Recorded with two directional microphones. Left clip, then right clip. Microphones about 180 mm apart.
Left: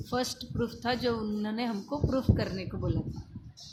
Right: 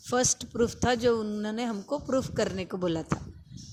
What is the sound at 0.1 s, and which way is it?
Speech, 40° right (ahead or behind).